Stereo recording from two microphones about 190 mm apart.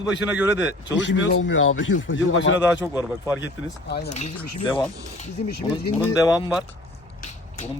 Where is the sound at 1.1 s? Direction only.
70° left (ahead or behind).